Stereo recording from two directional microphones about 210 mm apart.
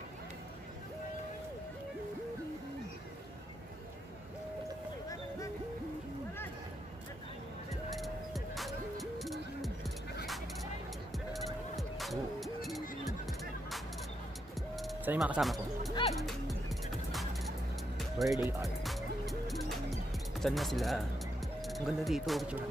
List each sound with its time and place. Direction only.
7.9 s music: centre (ahead or behind)
11.3 s bleat: centre (ahead or behind)
14.8 s speech: centre (ahead or behind)
15.9 s speech: 25° left (ahead or behind)
16.2 s music: centre (ahead or behind)
21.6 s speech: centre (ahead or behind)